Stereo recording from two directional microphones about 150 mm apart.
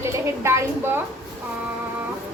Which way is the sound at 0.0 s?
15° right (ahead or behind).